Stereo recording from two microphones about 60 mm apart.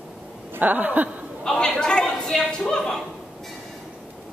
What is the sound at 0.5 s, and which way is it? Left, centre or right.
Speech, right.